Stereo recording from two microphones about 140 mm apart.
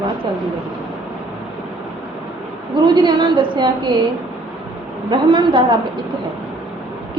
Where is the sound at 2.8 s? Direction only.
35° right (ahead or behind).